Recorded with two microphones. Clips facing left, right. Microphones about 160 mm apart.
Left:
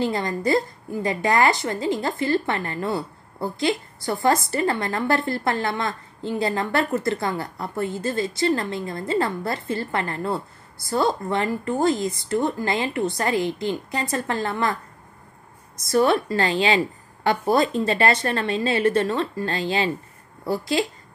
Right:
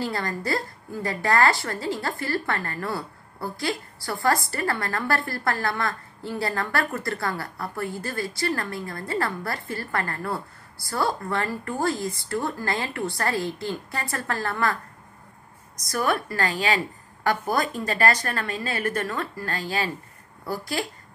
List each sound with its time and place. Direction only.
0.0 s a woman's voice: 20° left (ahead or behind)